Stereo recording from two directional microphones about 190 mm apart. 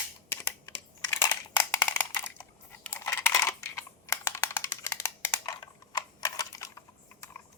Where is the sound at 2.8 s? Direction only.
10° left (ahead or behind).